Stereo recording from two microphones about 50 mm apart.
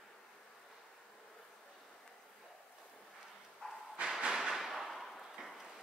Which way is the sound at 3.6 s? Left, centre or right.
Centre.